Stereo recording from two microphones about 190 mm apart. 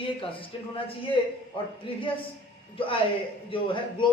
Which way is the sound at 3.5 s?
25° left (ahead or behind).